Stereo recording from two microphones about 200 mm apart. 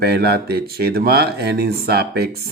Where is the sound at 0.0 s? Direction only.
55° right (ahead or behind).